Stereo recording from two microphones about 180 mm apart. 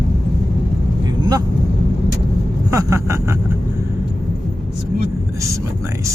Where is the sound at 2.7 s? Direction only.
15° right (ahead or behind).